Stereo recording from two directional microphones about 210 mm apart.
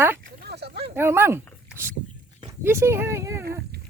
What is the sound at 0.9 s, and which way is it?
Speech, 10° right (ahead or behind).